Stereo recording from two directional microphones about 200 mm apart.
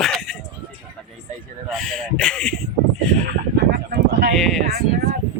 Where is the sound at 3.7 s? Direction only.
50° right (ahead or behind).